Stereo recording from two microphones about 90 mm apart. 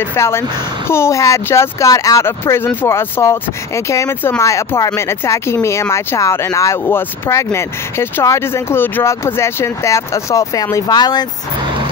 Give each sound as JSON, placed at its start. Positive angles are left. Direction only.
{"t": 0.1, "sound": "speech", "side_deg": 30}